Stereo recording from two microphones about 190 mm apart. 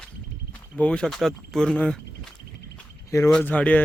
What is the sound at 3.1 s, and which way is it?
Speech, 15° left (ahead or behind).